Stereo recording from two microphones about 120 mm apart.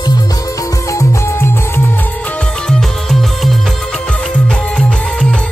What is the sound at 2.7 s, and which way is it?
Music, 5° left (ahead or behind).